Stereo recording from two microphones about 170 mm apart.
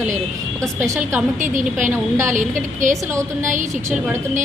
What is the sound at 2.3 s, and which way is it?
A woman's voice, 45° right (ahead or behind).